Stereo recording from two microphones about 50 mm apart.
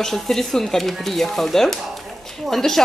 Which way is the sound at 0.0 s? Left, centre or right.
Centre.